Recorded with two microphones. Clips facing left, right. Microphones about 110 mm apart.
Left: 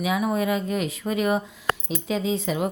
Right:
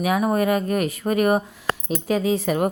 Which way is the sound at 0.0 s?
50° right (ahead or behind).